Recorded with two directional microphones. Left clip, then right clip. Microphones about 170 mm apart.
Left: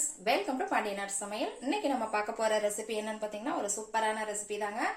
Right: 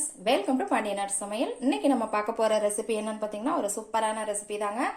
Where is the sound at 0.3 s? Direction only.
50° right (ahead or behind).